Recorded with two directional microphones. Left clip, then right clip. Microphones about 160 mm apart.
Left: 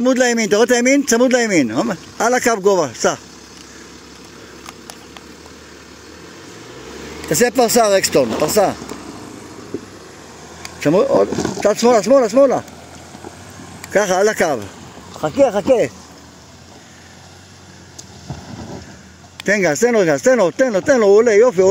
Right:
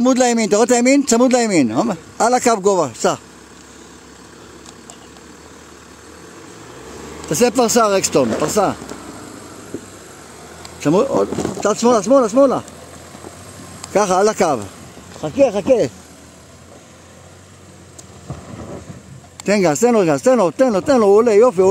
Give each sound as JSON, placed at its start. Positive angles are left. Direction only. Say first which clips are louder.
{"t": 0.0, "sound": "speech", "louder": "even", "side_deg": -30}
{"t": 7.5, "sound": "speech", "louder": "left 3 dB", "side_deg": -20}
{"t": 10.8, "sound": "speech", "louder": "left 1 dB", "side_deg": -20}
{"t": 11.3, "sound": "speech", "louder": "left 1 dB", "side_deg": 15}
{"t": 11.6, "sound": "speech", "louder": "left 2 dB", "side_deg": -15}
{"t": 13.9, "sound": "speech", "louder": "even", "side_deg": -20}
{"t": 19.4, "sound": "speech", "louder": "even", "side_deg": -15}